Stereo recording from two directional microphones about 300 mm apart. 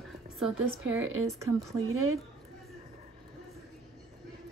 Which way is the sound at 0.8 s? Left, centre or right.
Right.